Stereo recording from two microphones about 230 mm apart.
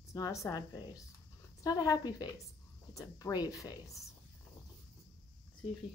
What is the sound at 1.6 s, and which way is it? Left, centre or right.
Speech, centre.